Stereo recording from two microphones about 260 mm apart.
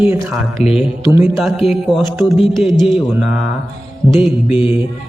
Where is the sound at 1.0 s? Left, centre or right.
Centre.